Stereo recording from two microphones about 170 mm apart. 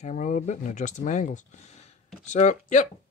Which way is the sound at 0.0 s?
50° left (ahead or behind).